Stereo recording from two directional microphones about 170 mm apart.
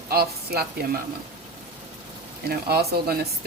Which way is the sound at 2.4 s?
65° right (ahead or behind).